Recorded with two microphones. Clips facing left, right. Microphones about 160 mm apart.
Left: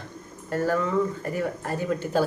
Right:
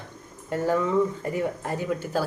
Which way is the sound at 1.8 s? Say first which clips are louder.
Left 3 dB; 5° right (ahead or behind).